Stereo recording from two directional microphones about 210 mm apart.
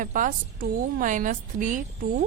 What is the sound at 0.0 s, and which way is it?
A woman's voice, 40° right (ahead or behind).